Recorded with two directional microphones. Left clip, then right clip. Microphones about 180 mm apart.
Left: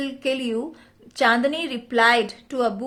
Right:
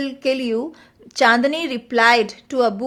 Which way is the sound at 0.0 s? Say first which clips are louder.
Right 4 dB; 20° right (ahead or behind).